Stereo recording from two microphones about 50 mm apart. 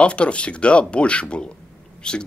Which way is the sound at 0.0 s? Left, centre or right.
Left.